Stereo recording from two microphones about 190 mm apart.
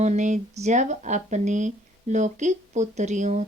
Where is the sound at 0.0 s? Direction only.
40° right (ahead or behind).